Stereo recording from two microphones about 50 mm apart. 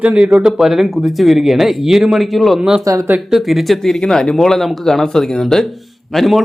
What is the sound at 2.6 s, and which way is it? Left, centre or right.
Speech, centre.